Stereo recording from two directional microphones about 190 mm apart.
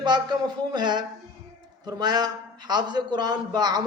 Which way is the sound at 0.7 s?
25° right (ahead or behind).